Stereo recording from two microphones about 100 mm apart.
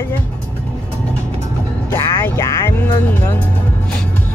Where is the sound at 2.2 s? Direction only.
30° left (ahead or behind).